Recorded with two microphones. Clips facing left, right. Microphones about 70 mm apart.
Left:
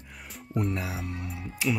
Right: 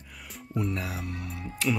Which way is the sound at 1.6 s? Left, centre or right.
Centre.